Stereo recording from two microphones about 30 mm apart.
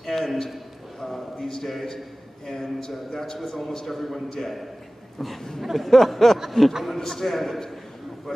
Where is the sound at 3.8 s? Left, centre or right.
Centre.